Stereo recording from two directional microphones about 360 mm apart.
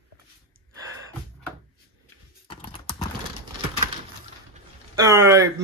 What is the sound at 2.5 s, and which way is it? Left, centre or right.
Clip-clop, centre.